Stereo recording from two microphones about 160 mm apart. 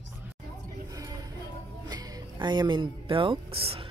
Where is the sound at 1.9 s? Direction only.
25° right (ahead or behind).